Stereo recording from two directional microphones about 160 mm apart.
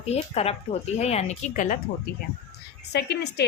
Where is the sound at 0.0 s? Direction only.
40° left (ahead or behind).